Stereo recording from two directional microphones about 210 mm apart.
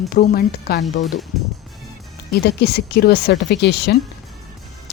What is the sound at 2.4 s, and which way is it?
Speech, 50° left (ahead or behind).